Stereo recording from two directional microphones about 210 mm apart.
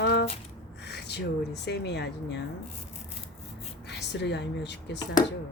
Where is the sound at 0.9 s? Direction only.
55° left (ahead or behind).